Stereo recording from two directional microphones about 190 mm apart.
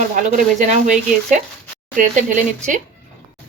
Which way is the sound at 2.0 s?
40° right (ahead or behind).